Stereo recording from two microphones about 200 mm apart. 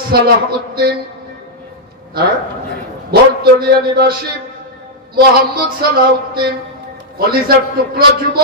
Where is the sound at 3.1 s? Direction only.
50° right (ahead or behind).